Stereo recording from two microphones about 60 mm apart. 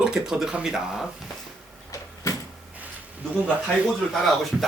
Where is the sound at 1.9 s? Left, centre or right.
Left.